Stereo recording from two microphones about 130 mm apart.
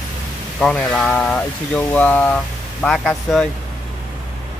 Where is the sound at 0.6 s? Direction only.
5° left (ahead or behind).